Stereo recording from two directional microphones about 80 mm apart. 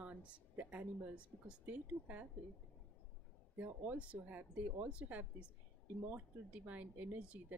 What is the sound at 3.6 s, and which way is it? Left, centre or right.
A woman's voice, centre.